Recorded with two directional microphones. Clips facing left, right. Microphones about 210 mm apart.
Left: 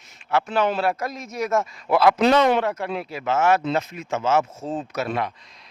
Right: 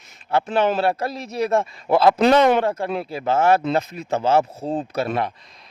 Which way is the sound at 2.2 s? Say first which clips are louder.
Right 2 dB; 50° right (ahead or behind).